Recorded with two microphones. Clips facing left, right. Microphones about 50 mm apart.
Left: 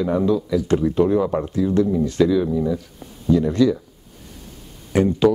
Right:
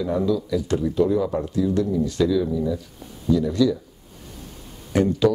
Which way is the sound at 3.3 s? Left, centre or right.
Left.